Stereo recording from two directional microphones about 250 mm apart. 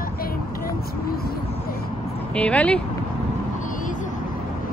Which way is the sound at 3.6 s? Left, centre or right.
Left.